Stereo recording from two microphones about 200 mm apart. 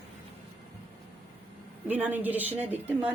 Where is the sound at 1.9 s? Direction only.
10° right (ahead or behind).